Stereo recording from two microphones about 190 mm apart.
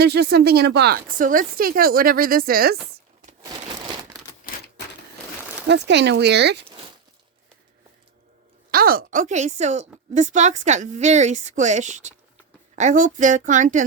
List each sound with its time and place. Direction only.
0.0 s speech: 60° right (ahead or behind)
3.4 s crumpling: 20° right (ahead or behind)
5.6 s speech: 65° right (ahead or behind)
8.7 s a woman's voice: 50° right (ahead or behind)